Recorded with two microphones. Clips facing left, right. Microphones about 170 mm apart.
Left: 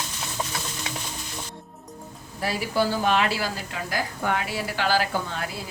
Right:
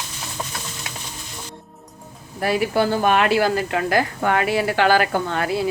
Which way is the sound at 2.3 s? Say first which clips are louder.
Right 6 dB; 60° right (ahead or behind).